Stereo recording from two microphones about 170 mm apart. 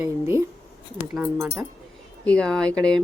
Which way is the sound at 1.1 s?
5° right (ahead or behind).